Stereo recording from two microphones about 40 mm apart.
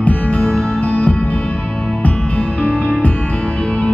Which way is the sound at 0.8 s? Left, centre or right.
Left.